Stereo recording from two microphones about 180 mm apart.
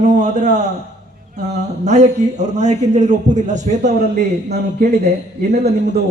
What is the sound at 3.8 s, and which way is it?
A man's voice, 65° right (ahead or behind).